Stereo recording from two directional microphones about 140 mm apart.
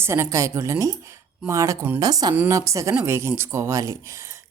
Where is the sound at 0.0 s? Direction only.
20° right (ahead or behind).